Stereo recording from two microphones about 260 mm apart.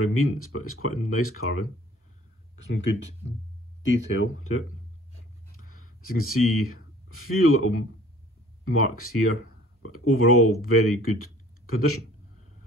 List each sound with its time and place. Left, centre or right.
0.1 s speech: left
2.6 s speech: left
5.7 s speech: left
8.9 s speech: left